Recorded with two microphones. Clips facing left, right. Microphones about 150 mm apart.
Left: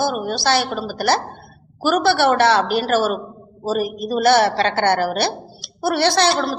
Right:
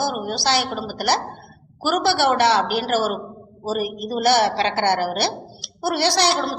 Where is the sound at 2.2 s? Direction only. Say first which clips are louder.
Left 2 dB; 15° right (ahead or behind).